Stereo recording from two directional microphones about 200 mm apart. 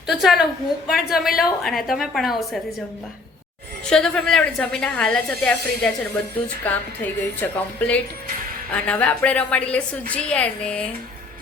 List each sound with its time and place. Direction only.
0.1 s a woman's voice: centre (ahead or behind)
3.8 s a woman's voice: 5° left (ahead or behind)